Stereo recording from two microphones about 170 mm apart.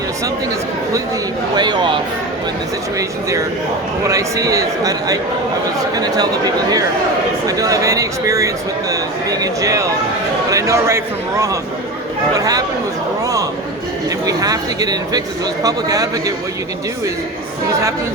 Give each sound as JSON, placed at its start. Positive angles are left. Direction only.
{"t": 1.5, "sound": "speech", "side_deg": -25}
{"t": 3.0, "sound": "speech", "side_deg": -20}
{"t": 7.4, "sound": "a man's voice", "side_deg": -20}
{"t": 14.3, "sound": "speech", "side_deg": -20}